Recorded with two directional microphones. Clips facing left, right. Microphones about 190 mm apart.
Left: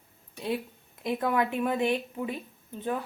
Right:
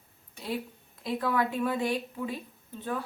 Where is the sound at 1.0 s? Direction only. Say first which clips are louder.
Left 2 dB; 20° left (ahead or behind).